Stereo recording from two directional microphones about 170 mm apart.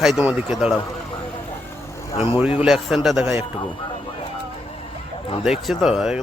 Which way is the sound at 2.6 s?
Centre (ahead or behind).